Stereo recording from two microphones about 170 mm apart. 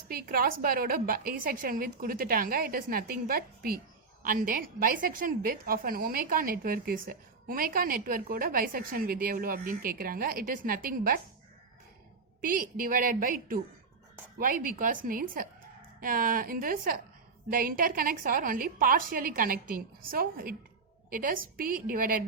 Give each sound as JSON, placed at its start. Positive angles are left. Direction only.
{"t": 0.1, "sound": "a woman's voice", "side_deg": -60}
{"t": 12.4, "sound": "a woman's voice", "side_deg": -55}